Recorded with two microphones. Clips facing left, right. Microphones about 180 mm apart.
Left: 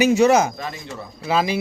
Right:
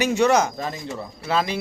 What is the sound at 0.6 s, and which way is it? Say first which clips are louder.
Speech: right 2 dB; 25° right (ahead or behind).